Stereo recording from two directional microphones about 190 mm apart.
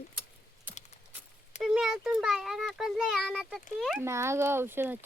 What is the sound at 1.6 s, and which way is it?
A child's voice, 5° right (ahead or behind).